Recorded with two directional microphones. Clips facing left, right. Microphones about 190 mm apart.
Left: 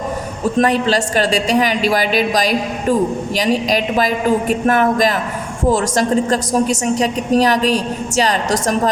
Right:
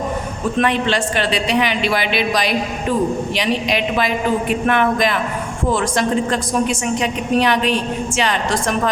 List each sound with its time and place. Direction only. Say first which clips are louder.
0.5 s a woman's voice: left 3 dB; 40° left (ahead or behind)